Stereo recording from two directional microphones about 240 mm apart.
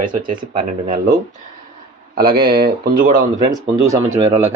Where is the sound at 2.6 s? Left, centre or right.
Right.